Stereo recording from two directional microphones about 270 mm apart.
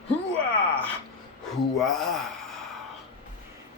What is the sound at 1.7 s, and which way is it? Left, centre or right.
Speech, centre.